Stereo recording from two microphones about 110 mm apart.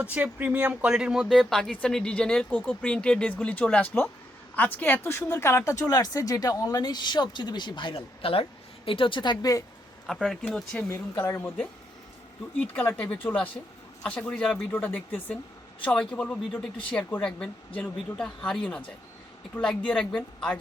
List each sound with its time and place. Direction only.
0.0 s speech: 15° right (ahead or behind); by 9.6 s 35° left (ahead or behind)
10.1 s speech: 5° left (ahead or behind)